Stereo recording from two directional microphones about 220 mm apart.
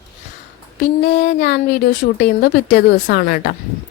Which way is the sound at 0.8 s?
50° left (ahead or behind).